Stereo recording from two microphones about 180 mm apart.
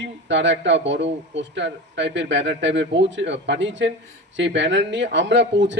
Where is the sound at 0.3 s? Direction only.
85° right.